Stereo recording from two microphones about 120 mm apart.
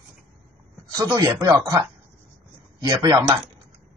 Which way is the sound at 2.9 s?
35° right (ahead or behind).